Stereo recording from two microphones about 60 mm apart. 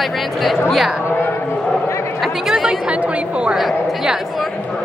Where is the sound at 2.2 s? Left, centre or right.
Centre.